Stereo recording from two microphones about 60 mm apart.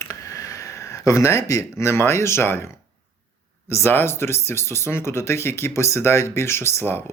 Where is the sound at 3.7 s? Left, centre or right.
Left.